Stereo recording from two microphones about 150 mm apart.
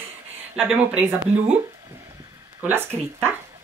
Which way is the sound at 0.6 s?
10° right (ahead or behind).